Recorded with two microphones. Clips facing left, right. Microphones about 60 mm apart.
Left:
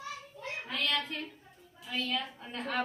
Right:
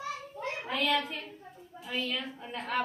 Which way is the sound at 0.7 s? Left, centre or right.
Centre.